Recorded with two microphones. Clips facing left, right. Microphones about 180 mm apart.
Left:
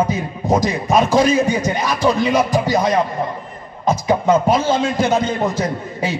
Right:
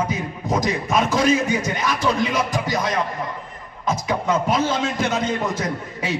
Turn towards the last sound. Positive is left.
turn(degrees=30)  # may be behind; listen again after turning